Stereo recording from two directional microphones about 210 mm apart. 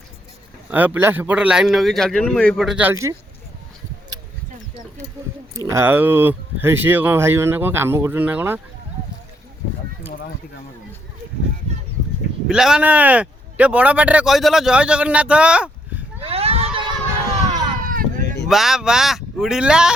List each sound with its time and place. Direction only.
0.7 s speech: 10° right (ahead or behind)
5.5 s speech: 15° right (ahead or behind)
12.5 s speech: 5° right (ahead or behind)
16.2 s a sound: 30° right (ahead or behind)
18.4 s speech: centre (ahead or behind)